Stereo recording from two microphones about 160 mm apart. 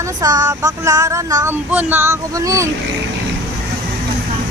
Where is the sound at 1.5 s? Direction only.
10° right (ahead or behind).